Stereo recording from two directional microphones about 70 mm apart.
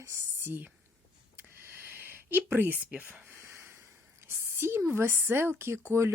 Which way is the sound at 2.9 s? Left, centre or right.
Right.